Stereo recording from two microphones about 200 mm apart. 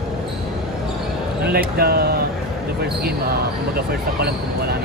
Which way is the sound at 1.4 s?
50° right (ahead or behind).